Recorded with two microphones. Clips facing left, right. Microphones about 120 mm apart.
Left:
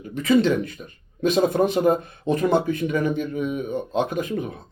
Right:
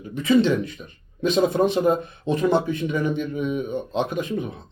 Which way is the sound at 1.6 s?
50° left (ahead or behind).